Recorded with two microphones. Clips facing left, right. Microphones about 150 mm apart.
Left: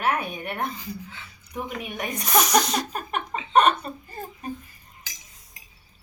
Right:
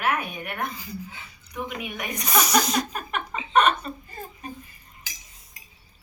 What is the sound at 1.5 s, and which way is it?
Speech, 30° left (ahead or behind).